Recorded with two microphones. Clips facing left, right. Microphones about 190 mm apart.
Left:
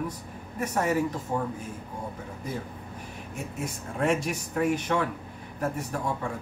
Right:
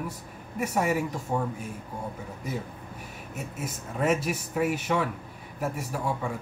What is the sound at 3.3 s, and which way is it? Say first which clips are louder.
Speech: left 1 dB; 5° right (ahead or behind).